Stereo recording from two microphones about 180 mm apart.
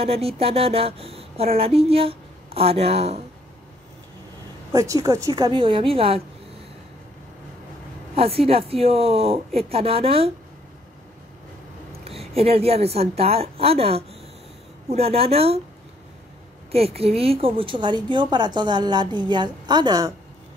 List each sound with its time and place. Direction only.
0.0 s speech: 35° right (ahead or behind)
4.7 s a woman's voice: 20° right (ahead or behind)
8.2 s speech: 35° right (ahead or behind)
11.9 s a woman's voice: 35° right (ahead or behind)
16.7 s a woman's voice: 35° right (ahead or behind)